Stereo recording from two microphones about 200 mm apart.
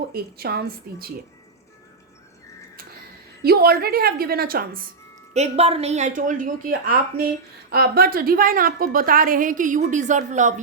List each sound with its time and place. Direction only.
0.1 s a woman's voice: 50° right (ahead or behind)
3.4 s a woman's voice: 50° right (ahead or behind)
5.3 s a woman's voice: 30° right (ahead or behind)